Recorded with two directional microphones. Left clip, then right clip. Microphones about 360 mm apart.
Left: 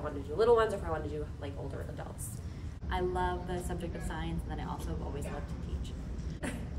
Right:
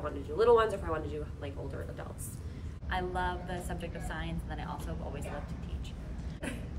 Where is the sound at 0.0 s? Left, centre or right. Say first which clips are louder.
Right 1 dB; centre.